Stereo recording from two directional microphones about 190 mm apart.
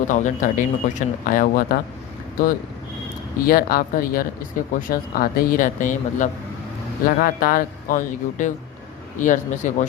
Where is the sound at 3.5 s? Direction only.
50° left (ahead or behind).